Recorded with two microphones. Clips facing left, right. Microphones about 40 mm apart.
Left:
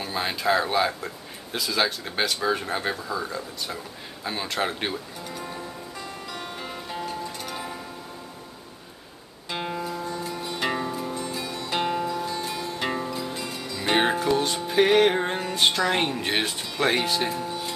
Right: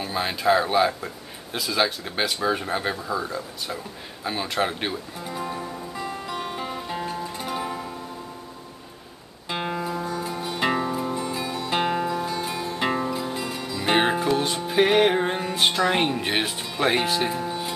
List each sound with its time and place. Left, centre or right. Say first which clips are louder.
0.0 s speech: right 2 dB; centre
5.2 s music: right 4 dB; centre
9.5 s music: right 2 dB; centre